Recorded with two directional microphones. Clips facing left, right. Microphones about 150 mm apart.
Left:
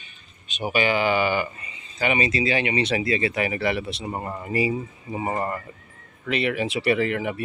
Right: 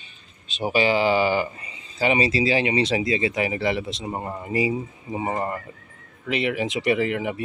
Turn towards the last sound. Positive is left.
turn(degrees=-20)  # may be behind; listen again after turning